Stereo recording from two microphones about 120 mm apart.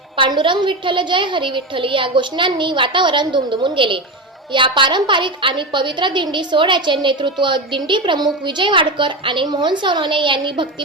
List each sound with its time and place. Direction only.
0.2 s a woman's voice: 40° right (ahead or behind)